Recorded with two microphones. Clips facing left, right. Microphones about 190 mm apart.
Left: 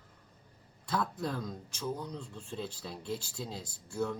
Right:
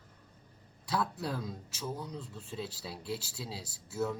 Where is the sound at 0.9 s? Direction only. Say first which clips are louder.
Even; 5° right (ahead or behind).